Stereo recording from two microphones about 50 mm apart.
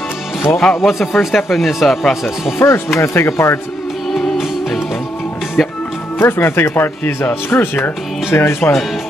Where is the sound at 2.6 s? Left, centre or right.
Left.